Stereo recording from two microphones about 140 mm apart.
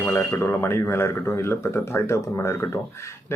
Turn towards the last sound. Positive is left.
turn(degrees=20)  # may be behind; listen again after turning